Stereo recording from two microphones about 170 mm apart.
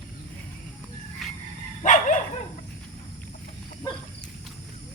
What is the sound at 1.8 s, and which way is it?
Dog, 45° left (ahead or behind).